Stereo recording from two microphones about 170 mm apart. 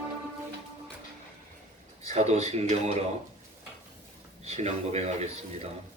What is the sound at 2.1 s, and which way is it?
Speech, 40° right (ahead or behind).